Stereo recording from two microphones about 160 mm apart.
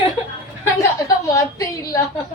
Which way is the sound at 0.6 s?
20° left (ahead or behind).